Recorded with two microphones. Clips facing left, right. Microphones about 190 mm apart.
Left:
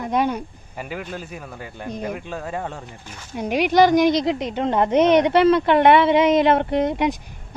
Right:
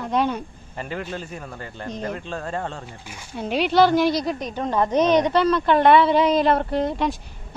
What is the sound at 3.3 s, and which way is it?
A woman's voice, 15° left (ahead or behind).